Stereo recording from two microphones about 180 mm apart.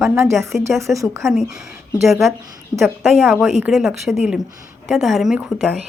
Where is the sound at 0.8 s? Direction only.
15° right (ahead or behind).